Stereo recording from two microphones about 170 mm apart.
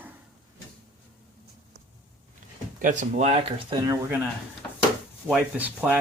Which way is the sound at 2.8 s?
50° right (ahead or behind).